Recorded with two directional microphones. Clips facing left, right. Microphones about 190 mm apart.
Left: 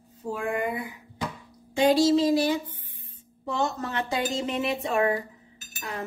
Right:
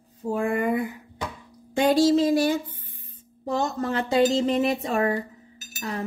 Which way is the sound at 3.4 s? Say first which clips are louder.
Right 3 dB; 40° right (ahead or behind).